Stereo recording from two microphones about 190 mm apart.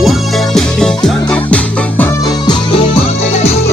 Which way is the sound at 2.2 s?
20° left (ahead or behind).